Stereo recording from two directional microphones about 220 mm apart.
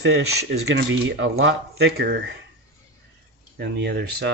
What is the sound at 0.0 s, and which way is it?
Speech, 50° right (ahead or behind).